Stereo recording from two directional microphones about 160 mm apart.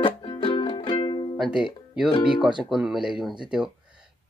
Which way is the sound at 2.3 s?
30° right (ahead or behind).